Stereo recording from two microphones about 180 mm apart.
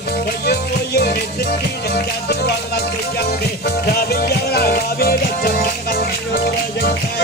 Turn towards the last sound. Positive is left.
turn(degrees=55)  # may be behind; listen again after turning